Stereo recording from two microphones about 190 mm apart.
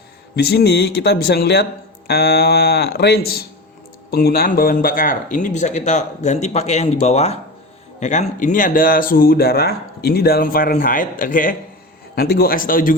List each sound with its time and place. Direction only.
0.3 s speech: 60° left (ahead or behind)